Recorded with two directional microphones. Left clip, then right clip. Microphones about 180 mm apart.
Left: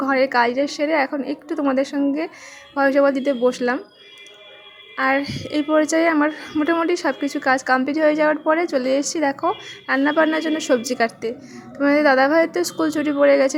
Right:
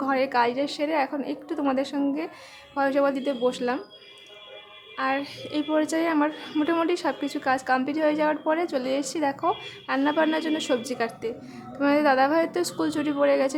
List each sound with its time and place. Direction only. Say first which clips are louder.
0.0 s speech: left 5 dB; 20° left (ahead or behind)
4.9 s speech: left 7 dB; 25° left (ahead or behind)